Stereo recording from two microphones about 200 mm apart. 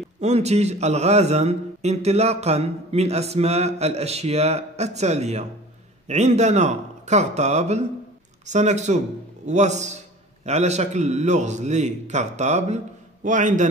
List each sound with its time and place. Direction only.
0.2 s a man's voice: 35° right (ahead or behind)